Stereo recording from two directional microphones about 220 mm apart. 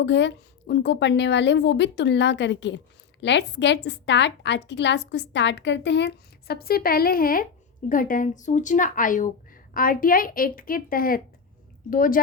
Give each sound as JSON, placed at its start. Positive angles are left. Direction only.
{"t": 0.0, "sound": "a woman's voice", "side_deg": 55}